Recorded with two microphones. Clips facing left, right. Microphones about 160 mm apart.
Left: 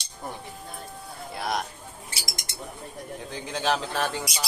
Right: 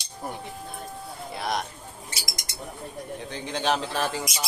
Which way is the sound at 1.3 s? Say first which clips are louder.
Even; centre (ahead or behind).